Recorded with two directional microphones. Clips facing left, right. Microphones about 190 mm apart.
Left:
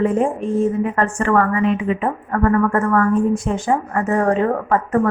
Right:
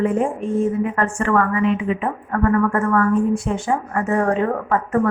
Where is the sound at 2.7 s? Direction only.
40° left (ahead or behind).